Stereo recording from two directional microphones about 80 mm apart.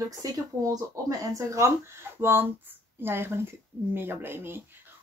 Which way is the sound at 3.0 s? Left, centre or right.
Right.